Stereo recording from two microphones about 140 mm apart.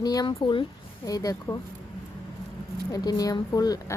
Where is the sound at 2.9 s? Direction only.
25° left (ahead or behind).